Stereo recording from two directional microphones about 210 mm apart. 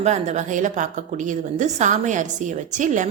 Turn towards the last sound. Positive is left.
turn(degrees=-35)  # may be behind; listen again after turning